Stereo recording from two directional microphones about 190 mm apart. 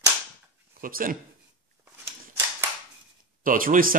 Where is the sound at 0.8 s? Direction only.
50° right (ahead or behind).